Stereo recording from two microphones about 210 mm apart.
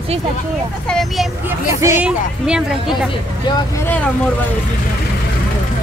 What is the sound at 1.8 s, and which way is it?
Speech, 10° right (ahead or behind).